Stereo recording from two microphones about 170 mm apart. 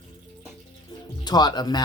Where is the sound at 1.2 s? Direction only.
25° left (ahead or behind).